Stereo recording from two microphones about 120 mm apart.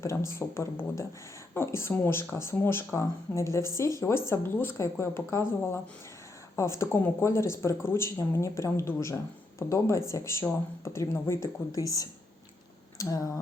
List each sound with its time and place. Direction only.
0.0 s speech: 25° left (ahead or behind)